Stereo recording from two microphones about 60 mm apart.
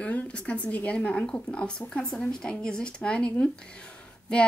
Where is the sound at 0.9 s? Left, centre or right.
Centre.